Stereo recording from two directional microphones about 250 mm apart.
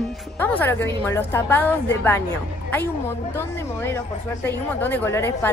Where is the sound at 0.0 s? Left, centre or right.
Centre.